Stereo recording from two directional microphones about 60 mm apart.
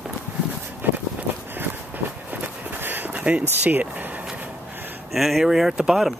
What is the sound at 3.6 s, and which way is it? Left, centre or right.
Speech, right.